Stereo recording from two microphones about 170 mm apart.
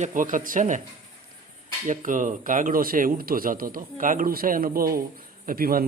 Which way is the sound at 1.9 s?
50° right (ahead or behind).